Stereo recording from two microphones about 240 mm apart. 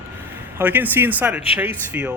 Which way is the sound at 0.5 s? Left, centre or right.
Centre.